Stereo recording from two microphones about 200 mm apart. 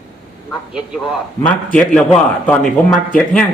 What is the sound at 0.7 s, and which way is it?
A man's voice, centre (ahead or behind).